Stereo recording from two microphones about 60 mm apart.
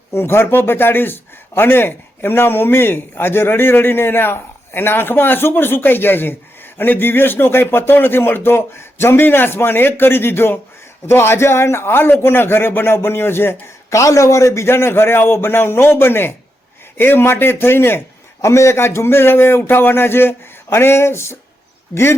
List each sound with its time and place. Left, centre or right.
0.1 s a man's voice: left
13.9 s a man's voice: left
18.4 s a man's voice: left